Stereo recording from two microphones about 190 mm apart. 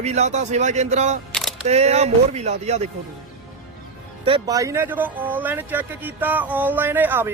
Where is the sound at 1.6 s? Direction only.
35° right (ahead or behind).